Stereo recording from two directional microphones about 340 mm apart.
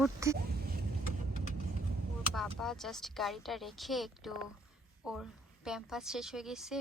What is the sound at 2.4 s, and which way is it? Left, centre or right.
A woman's voice, centre.